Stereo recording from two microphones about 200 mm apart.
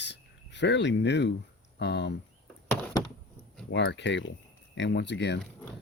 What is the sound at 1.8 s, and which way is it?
Speech, 60° left (ahead or behind).